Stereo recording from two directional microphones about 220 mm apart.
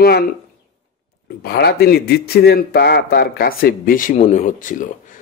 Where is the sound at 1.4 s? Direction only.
45° left (ahead or behind).